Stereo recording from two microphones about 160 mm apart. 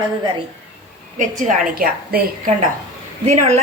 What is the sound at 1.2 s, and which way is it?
A woman's voice, 55° right (ahead or behind).